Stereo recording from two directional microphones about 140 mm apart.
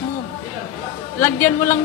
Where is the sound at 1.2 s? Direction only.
15° left (ahead or behind).